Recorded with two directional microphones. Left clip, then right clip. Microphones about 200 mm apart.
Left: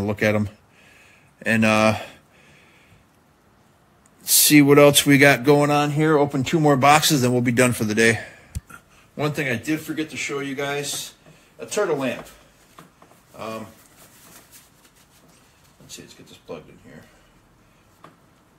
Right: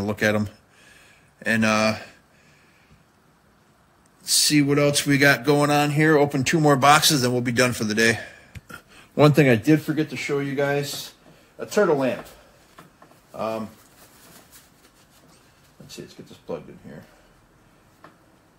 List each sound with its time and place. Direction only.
0.0 s a sound: 5° left (ahead or behind); by 2.1 s 20° left (ahead or behind)
4.2 s speech: 30° left (ahead or behind)
5.6 s speech: centre (ahead or behind)
6.8 s a man's voice: 10° left (ahead or behind)
8.7 s speech: 65° right (ahead or behind); by 10.7 s 45° right (ahead or behind)
11.7 s speech: 30° right (ahead or behind)
15.9 s speech: 35° right (ahead or behind)